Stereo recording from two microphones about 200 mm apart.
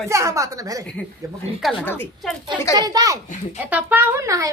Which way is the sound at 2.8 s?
20° right (ahead or behind).